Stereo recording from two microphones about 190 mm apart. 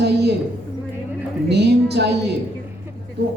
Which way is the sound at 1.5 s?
60° right (ahead or behind).